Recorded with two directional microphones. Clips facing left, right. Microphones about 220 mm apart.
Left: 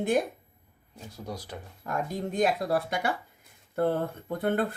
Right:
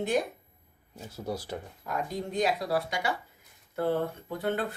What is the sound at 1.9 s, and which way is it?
Speech, 50° left (ahead or behind).